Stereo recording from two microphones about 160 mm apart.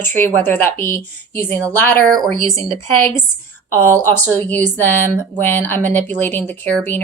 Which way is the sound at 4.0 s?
15° left (ahead or behind).